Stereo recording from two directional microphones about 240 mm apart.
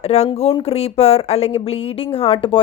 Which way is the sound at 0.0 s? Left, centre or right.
Left.